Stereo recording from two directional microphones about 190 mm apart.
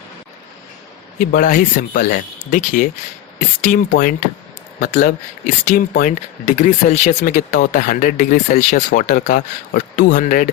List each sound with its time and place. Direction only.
1.4 s speech: 45° left (ahead or behind)